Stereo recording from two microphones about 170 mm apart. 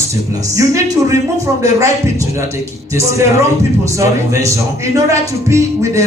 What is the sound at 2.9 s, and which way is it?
Speech, 15° right (ahead or behind).